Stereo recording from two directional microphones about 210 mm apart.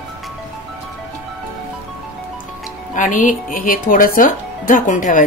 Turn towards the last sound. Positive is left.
turn(degrees=40)  # may be behind; listen again after turning